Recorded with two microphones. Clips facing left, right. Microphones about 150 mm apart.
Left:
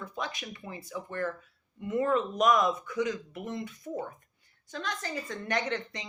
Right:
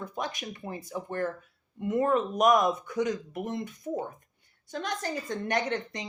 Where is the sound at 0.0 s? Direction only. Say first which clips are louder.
Right 2 dB; 45° right (ahead or behind).